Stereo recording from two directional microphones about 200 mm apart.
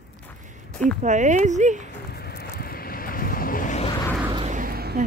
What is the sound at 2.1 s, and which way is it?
Vehicle, 50° left (ahead or behind).